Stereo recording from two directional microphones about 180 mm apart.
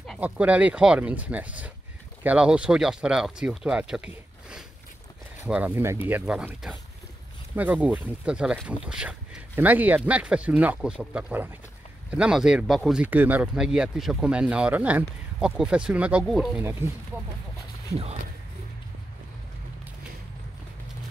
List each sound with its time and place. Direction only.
0.2 s speech: 5° right (ahead or behind)